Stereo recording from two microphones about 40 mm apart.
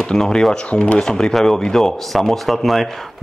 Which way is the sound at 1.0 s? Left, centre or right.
Centre.